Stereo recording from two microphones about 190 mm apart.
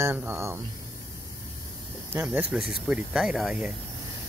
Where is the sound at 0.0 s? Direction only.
15° right (ahead or behind).